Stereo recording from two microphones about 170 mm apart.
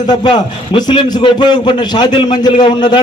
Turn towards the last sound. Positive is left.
turn(degrees=25)  # may be behind; listen again after turning